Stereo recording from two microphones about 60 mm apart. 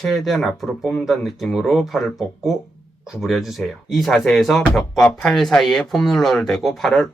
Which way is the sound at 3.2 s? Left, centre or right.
Centre.